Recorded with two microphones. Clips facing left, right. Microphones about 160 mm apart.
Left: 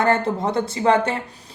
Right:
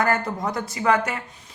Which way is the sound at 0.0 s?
25° left (ahead or behind).